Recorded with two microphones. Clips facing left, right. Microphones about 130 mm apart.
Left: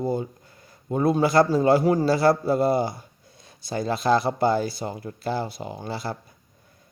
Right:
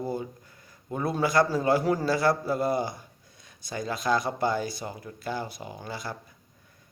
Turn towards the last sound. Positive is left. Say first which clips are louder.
# left 5 dB
turn(degrees=30)  # may be behind; listen again after turning